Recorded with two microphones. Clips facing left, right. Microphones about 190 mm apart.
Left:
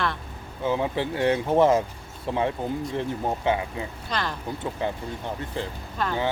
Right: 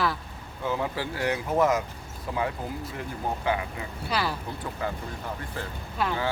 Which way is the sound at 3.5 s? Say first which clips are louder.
Left 3 dB; 25° left (ahead or behind).